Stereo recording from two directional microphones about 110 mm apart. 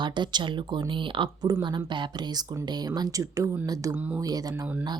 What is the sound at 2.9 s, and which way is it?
Speech, 35° right (ahead or behind).